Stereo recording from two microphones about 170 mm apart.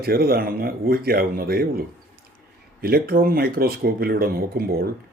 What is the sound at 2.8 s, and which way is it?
Speech, 60° right (ahead or behind).